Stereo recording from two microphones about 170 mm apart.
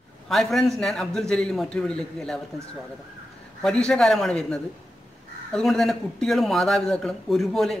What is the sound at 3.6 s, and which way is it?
Speech, 5° left (ahead or behind).